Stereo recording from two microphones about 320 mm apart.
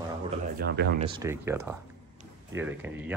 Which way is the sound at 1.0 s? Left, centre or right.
Centre.